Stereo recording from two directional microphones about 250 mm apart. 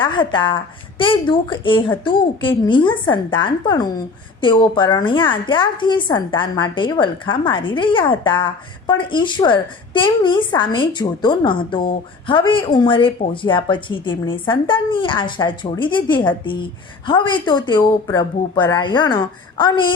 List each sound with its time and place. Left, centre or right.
0.0 s a woman's voice: centre